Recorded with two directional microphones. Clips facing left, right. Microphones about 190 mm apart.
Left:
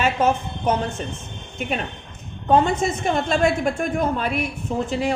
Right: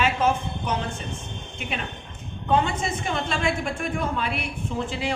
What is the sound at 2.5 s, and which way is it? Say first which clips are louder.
A woman's voice: left 5 dB; 45° left (ahead or behind).